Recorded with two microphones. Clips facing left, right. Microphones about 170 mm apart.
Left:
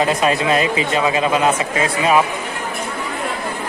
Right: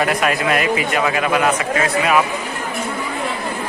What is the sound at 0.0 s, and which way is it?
A man's voice, 25° left (ahead or behind).